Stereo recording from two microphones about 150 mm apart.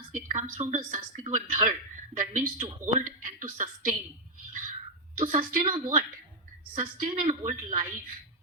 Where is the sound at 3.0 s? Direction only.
60° right (ahead or behind).